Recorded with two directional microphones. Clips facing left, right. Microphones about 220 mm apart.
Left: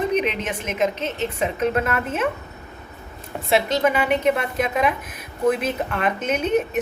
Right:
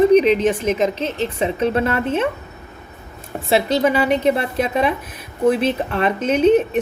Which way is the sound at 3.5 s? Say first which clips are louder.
Right 3 dB; 35° right (ahead or behind).